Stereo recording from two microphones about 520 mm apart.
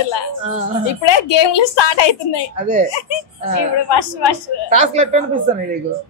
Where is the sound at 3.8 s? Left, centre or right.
Left.